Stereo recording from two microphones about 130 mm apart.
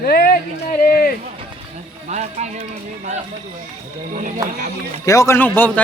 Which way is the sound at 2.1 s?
60° right (ahead or behind).